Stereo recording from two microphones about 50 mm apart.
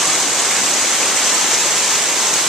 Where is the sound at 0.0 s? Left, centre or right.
Centre.